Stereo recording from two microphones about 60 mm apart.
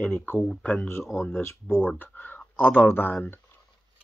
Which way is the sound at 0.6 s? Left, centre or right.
Left.